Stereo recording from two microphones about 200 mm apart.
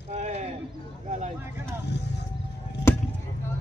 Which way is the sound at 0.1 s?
35° right (ahead or behind).